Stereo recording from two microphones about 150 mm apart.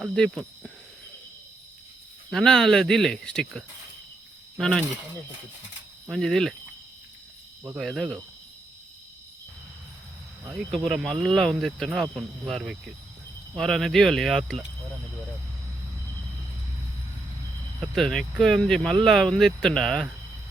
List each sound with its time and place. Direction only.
0.0 s speech: centre (ahead or behind)
2.3 s speech: 5° left (ahead or behind)
6.1 s speech: centre (ahead or behind)
7.8 s speech: centre (ahead or behind)
10.5 s speech: centre (ahead or behind)
17.7 s speech: centre (ahead or behind)